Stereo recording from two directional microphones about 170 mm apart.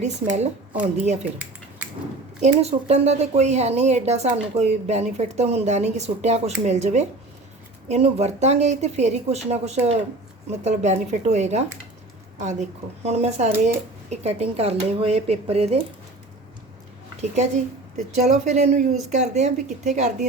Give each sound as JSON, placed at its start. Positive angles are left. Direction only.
{"t": 0.0, "sound": "a woman's voice", "side_deg": -40}
{"t": 2.4, "sound": "a woman's voice", "side_deg": -40}
{"t": 17.2, "sound": "a woman's voice", "side_deg": -45}